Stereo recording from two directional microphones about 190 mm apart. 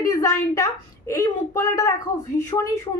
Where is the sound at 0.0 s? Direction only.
15° left (ahead or behind).